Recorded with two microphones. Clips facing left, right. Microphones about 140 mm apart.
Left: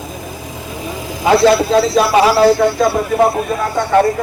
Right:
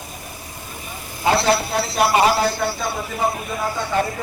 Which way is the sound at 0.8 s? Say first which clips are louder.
Left 7 dB; 90° left.